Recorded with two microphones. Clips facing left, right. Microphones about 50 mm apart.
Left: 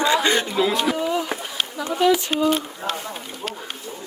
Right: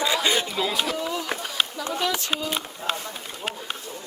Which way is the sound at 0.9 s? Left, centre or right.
Centre.